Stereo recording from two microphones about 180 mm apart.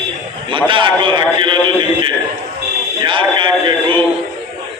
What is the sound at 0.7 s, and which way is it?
A man's voice, 25° right (ahead or behind).